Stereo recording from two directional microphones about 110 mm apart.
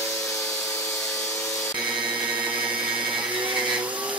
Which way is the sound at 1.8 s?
10° right (ahead or behind).